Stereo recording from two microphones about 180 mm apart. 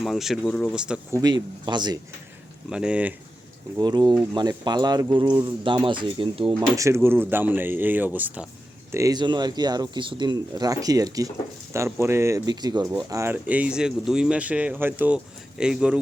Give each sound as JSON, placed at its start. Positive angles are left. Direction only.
{"t": 0.0, "sound": "speech", "side_deg": 0}
{"t": 1.1, "sound": "speech", "side_deg": -25}
{"t": 2.6, "sound": "speech", "side_deg": -5}
{"t": 3.8, "sound": "speech", "side_deg": -25}
{"t": 6.7, "sound": "speech", "side_deg": -15}